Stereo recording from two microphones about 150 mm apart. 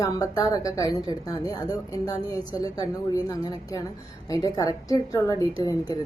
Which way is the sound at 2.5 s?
25° left (ahead or behind).